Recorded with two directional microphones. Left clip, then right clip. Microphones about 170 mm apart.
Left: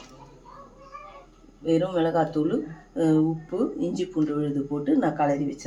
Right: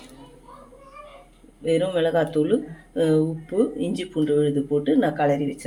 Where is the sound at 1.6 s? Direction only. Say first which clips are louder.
Right 2 dB; 45° right (ahead or behind).